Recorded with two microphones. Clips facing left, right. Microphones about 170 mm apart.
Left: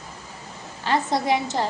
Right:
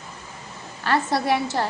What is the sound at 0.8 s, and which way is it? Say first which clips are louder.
Speech: even; 20° left (ahead or behind).